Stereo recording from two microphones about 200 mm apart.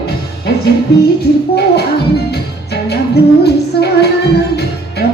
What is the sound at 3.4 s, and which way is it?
Child singing, 55° left (ahead or behind).